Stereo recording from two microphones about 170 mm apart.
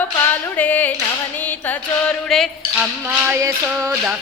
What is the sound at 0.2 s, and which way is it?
Female singing, 10° left (ahead or behind).